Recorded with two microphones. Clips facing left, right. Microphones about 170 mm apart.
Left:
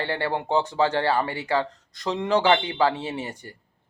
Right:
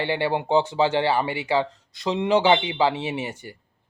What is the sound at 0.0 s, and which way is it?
Speech, 20° right (ahead or behind).